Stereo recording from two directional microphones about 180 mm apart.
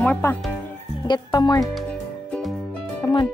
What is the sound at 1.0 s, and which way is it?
Speech, 25° left (ahead or behind).